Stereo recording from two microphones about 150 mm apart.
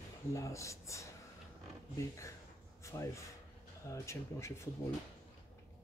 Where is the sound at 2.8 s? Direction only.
20° left (ahead or behind).